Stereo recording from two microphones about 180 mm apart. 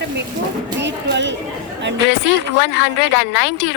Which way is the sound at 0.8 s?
75° right (ahead or behind).